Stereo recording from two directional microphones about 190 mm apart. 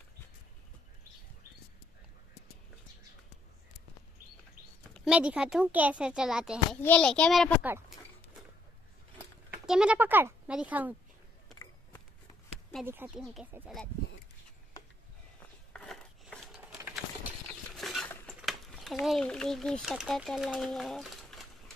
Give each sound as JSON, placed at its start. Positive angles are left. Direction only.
{"t": 4.9, "sound": "speech", "side_deg": -5}
{"t": 9.7, "sound": "speech", "side_deg": -5}
{"t": 11.5, "sound": "a sound", "side_deg": 15}
{"t": 12.8, "sound": "speech", "side_deg": -10}
{"t": 13.2, "sound": "speech", "side_deg": 0}
{"t": 15.7, "sound": "a sound", "side_deg": 5}
{"t": 16.8, "sound": "a sound", "side_deg": -10}
{"t": 17.7, "sound": "cutlery", "side_deg": 0}
{"t": 19.0, "sound": "speech", "side_deg": 5}